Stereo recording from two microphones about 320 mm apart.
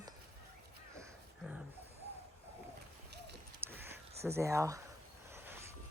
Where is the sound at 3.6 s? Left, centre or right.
Centre.